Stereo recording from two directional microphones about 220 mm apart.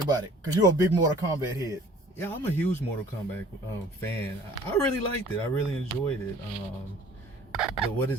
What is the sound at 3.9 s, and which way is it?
Speech, 10° left (ahead or behind).